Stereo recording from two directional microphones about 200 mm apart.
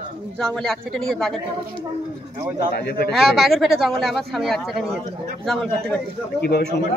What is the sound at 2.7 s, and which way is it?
Speech, 50° left (ahead or behind).